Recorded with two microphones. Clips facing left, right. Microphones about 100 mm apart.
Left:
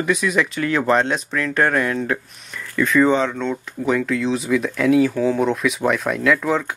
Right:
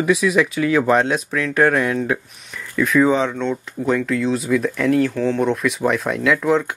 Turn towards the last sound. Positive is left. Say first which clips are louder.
# right 1 dB
turn(degrees=0)  # may be behind; listen again after turning